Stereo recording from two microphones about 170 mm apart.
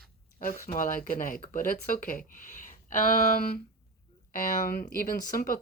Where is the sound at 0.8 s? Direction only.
50° left (ahead or behind).